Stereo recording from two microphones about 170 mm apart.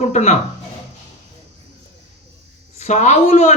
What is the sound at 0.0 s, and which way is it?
Speech, 40° left (ahead or behind).